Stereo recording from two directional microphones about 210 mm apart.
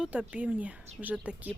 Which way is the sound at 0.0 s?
5° right (ahead or behind).